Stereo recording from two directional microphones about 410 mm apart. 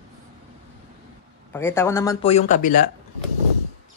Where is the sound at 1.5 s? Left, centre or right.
Centre.